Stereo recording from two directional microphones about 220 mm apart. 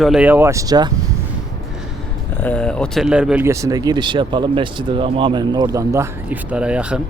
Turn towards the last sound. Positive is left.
turn(degrees=-5)  # may be behind; listen again after turning